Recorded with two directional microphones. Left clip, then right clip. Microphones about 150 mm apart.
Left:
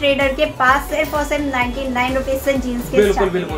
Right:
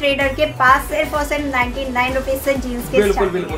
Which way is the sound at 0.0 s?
15° right (ahead or behind).